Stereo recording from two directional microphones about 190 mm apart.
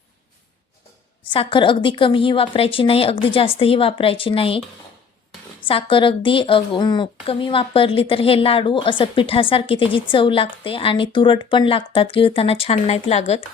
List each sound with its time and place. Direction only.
1.3 s a woman's voice: 25° left (ahead or behind)
5.6 s a woman's voice: 25° left (ahead or behind)